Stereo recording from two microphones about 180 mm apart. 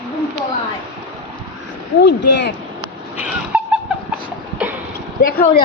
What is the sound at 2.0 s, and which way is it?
Speech, 70° left (ahead or behind).